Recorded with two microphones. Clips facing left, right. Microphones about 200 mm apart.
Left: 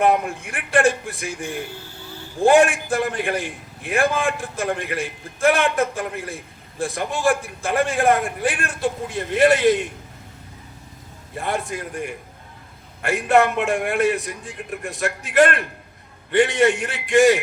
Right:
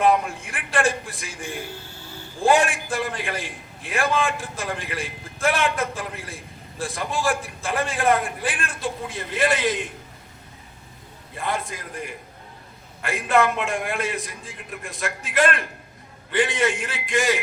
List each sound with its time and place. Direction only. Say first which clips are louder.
0.0 s a man's voice: left 1 dB; 60° left (ahead or behind)
2.5 s a man's voice: left 5 dB; 60° left (ahead or behind)
11.3 s a man's voice: left 3 dB; 55° left (ahead or behind)
13.3 s a man's voice: left 3 dB; 60° left (ahead or behind)